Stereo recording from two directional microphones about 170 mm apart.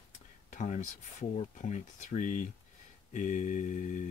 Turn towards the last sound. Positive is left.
turn(degrees=45)  # may be behind; listen again after turning